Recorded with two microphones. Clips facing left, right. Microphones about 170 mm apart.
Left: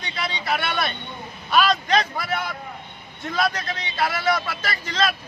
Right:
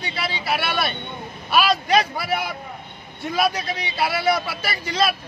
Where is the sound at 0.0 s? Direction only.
5° right (ahead or behind).